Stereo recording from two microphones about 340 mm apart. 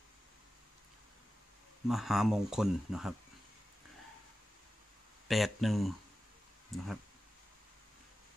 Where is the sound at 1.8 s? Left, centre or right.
Centre.